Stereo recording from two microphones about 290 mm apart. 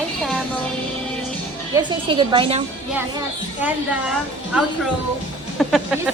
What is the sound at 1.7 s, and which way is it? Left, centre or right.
Speech, centre.